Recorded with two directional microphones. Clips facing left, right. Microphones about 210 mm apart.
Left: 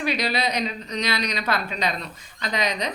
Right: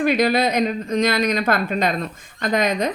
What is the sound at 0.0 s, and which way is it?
Speech, 50° right (ahead or behind).